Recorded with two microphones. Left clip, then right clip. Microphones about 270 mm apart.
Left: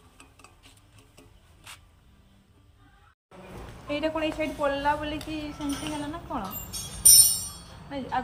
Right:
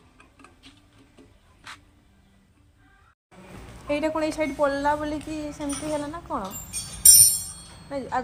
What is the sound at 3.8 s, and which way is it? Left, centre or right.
A woman's voice, centre.